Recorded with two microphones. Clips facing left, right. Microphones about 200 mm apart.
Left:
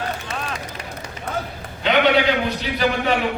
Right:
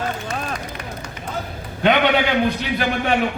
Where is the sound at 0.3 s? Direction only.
40° right (ahead or behind).